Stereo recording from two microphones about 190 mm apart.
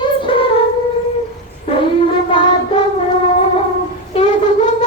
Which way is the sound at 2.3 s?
25° left (ahead or behind).